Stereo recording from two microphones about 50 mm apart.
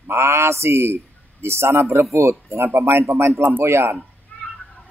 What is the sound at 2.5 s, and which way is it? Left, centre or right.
Speech, right.